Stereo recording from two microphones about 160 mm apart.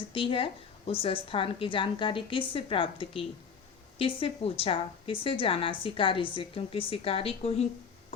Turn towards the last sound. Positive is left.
turn(degrees=40)  # may be behind; listen again after turning